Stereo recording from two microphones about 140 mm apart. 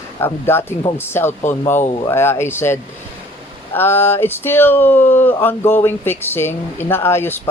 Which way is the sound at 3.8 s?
15° left (ahead or behind).